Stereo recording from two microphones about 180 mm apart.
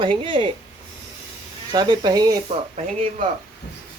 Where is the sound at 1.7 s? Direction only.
25° right (ahead or behind).